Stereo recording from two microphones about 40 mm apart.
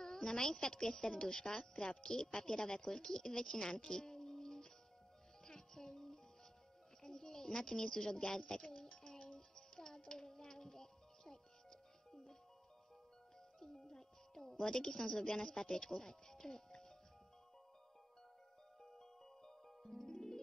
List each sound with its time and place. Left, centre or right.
0.0 s a woman's voice: centre
5.4 s music: centre
7.0 s a sound: centre
13.6 s speech: centre
18.8 s music: centre